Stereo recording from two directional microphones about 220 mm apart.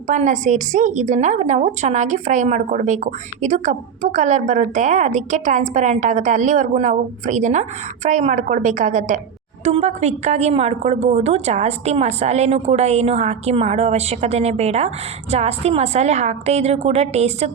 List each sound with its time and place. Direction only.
0.1 s a woman's voice: 35° right (ahead or behind)